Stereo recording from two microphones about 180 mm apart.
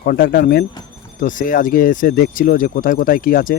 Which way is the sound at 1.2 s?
45° left (ahead or behind).